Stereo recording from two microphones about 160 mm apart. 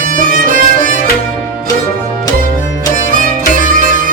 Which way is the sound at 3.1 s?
55° right (ahead or behind).